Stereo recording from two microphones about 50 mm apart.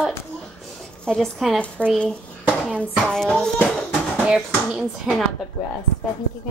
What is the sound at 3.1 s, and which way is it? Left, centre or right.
Speech, centre.